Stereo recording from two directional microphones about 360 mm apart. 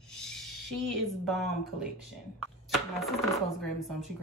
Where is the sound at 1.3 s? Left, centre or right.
Centre.